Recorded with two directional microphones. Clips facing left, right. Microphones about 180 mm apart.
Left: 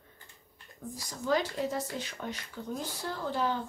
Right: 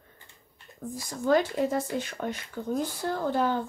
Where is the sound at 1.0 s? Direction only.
50° right (ahead or behind).